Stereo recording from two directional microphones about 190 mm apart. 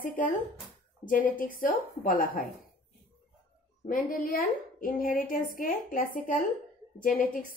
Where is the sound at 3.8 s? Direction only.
45° left (ahead or behind).